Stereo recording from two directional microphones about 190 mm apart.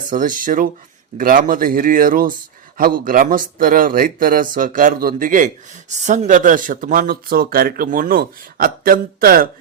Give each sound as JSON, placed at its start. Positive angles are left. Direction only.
{"t": 0.1, "sound": "speech", "side_deg": -45}